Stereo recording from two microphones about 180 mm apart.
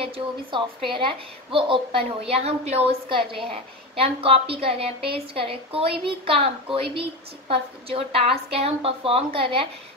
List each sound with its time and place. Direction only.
0.0 s a woman's voice: 30° right (ahead or behind)